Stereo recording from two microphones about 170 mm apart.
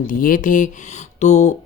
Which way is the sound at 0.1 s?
55° left (ahead or behind).